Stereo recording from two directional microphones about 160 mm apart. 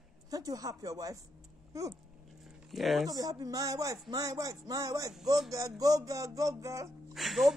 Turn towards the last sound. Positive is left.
turn(degrees=0)  # may be behind; listen again after turning